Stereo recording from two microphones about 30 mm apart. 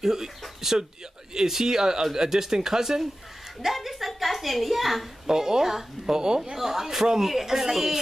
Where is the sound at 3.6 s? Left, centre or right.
Centre.